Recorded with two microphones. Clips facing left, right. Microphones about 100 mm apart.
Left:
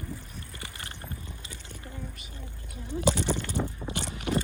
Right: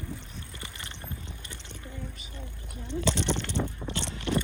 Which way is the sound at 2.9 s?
70° right (ahead or behind).